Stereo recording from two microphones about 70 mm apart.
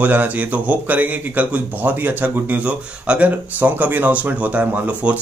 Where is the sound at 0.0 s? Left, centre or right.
Right.